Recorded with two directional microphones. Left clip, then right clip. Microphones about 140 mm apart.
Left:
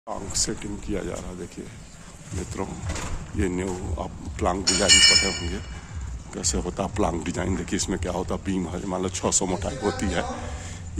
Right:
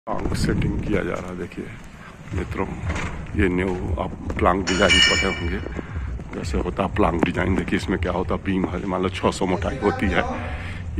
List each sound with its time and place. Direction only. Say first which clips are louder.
0.3 s speech: right 3 dB; 30° left (ahead or behind)
2.6 s speech: right 4 dB; 30° left (ahead or behind)
6.3 s speech: right 1 dB; 50° left (ahead or behind)
6.8 s speech: right 7 dB; 35° left (ahead or behind)